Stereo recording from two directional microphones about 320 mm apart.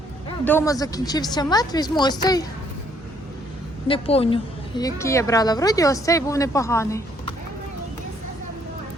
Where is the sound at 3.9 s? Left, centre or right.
Centre.